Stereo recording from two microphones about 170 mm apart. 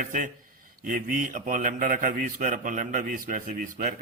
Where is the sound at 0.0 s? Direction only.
50° right (ahead or behind).